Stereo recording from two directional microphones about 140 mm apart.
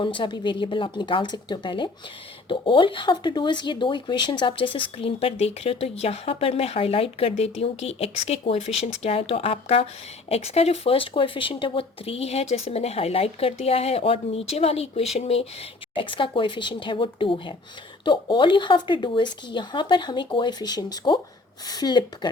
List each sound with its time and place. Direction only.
0.0 s speech: 35° left (ahead or behind)
16.0 s speech: 35° left (ahead or behind)